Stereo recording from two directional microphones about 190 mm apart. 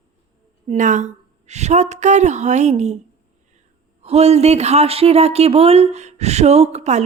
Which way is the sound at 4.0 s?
35° right (ahead or behind).